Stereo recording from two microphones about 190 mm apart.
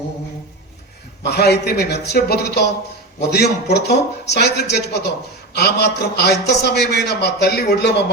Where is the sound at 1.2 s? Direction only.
60° left (ahead or behind).